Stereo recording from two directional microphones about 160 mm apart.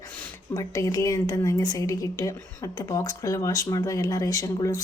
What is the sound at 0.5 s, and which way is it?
Speech, 20° left (ahead or behind).